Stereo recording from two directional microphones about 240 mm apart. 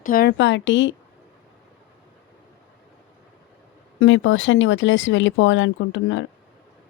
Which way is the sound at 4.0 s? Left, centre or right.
Left.